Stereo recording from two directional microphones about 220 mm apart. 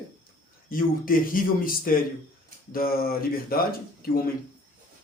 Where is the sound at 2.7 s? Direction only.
40° left (ahead or behind).